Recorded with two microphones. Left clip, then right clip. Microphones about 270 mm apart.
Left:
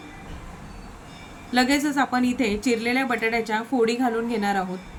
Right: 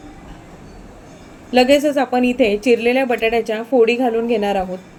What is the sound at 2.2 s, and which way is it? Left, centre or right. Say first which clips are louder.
Speech: right 9 dB; left.